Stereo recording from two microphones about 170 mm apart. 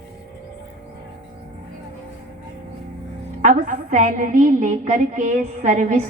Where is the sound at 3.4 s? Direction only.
50° right (ahead or behind).